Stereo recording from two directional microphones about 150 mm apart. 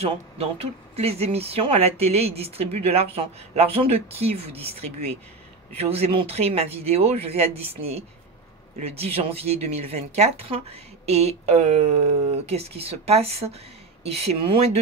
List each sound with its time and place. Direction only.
0.0 s a woman's voice: 45° right (ahead or behind)
5.8 s a woman's voice: 40° right (ahead or behind)